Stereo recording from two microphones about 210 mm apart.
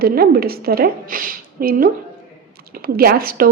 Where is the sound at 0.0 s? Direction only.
45° right (ahead or behind).